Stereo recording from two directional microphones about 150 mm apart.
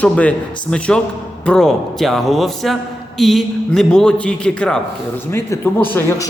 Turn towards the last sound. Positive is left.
turn(degrees=15)  # may be behind; listen again after turning